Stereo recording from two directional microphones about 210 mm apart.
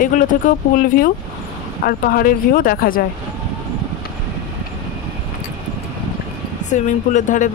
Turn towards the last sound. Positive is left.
turn(degrees=35)  # may be behind; listen again after turning